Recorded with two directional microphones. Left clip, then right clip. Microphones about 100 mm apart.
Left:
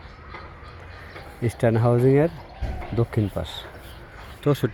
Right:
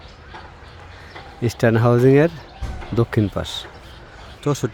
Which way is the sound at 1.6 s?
65° right (ahead or behind).